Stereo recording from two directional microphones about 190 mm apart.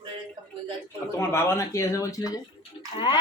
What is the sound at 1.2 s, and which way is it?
Speech, 15° left (ahead or behind).